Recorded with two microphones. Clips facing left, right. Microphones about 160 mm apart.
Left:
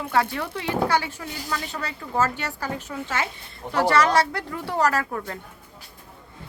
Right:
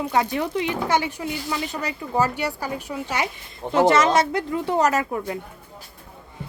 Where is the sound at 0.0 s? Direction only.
15° right (ahead or behind).